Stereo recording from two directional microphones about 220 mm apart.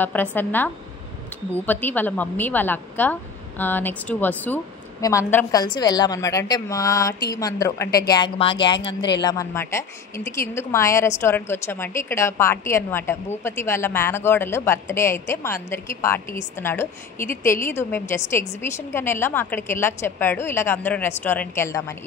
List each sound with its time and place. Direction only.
0.0 s a woman's voice: 10° left (ahead or behind)